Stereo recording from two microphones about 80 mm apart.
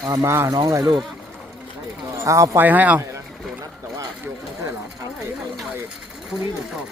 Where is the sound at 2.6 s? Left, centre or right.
Right.